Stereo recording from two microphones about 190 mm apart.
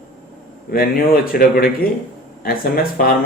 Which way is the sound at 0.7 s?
55° left (ahead or behind).